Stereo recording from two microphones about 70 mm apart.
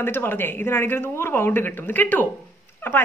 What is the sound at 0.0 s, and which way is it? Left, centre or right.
Speech, left.